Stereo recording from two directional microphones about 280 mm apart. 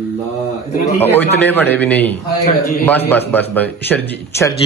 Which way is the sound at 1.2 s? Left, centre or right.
Centre.